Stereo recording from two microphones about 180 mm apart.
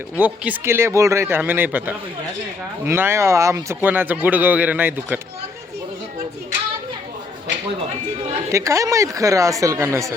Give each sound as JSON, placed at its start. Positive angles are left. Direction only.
{"t": 0.2, "sound": "speech", "side_deg": -10}
{"t": 8.5, "sound": "speech", "side_deg": -15}